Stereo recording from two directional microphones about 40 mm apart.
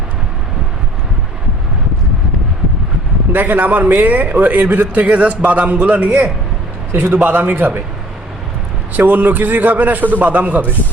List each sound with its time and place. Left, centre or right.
3.3 s a man's voice: right
5.1 s a man's voice: right
9.0 s a man's voice: right